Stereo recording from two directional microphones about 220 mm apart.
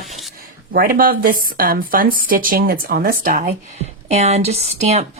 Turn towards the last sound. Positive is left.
turn(degrees=-30)  # may be behind; listen again after turning